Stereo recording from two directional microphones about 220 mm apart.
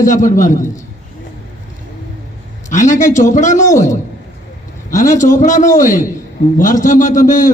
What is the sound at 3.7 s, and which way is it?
Speech, 15° left (ahead or behind).